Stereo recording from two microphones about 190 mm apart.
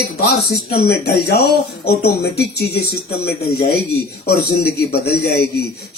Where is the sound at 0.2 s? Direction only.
55° left (ahead or behind).